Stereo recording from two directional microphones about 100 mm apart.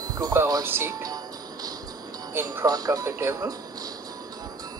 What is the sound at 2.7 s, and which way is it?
Speech, 40° right (ahead or behind).